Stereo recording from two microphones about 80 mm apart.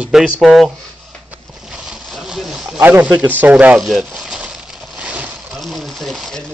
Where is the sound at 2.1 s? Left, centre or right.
Centre.